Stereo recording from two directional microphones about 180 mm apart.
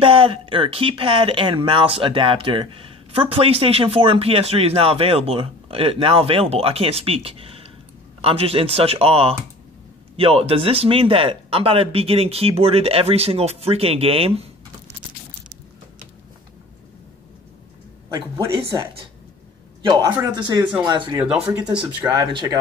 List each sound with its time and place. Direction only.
0.0 s speech: 30° right (ahead or behind)
19.9 s speech: 25° right (ahead or behind)
21.2 s speech: 10° right (ahead or behind)
22.1 s speech: 25° right (ahead or behind)